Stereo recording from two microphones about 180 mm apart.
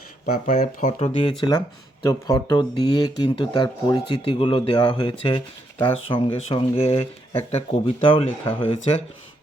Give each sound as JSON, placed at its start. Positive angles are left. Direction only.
{"t": 0.3, "sound": "speech", "side_deg": 45}